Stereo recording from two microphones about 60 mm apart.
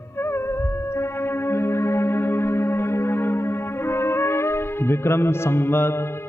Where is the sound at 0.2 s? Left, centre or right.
Left.